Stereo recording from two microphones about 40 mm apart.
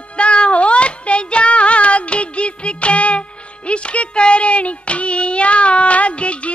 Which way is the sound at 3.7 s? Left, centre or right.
Left.